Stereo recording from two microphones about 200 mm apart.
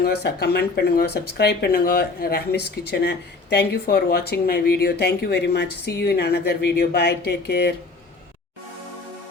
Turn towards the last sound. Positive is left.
turn(degrees=55)  # may be behind; listen again after turning